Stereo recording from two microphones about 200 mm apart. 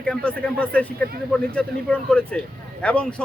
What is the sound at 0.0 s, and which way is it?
A man's voice, 5° left (ahead or behind).